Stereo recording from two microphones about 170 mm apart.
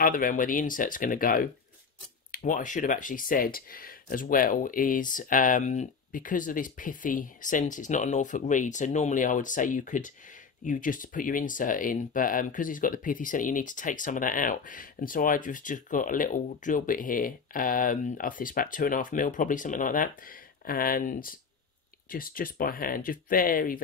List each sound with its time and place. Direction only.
0.0 s speech: 55° left (ahead or behind)